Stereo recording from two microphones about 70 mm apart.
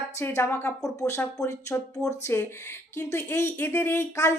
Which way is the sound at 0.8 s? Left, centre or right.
Left.